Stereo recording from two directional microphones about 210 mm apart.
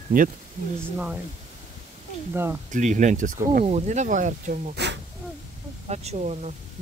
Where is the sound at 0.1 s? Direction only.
40° right (ahead or behind).